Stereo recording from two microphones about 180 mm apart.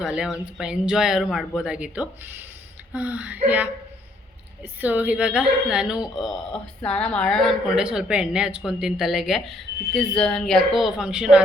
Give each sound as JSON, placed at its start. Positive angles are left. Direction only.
{"t": 0.0, "sound": "a woman's voice", "side_deg": -5}
{"t": 4.8, "sound": "a woman's voice", "side_deg": -10}